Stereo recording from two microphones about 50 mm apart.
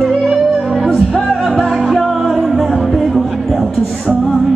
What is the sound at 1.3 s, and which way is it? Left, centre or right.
Music, centre.